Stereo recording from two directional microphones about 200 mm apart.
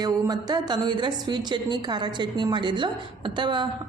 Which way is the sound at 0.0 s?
20° right (ahead or behind).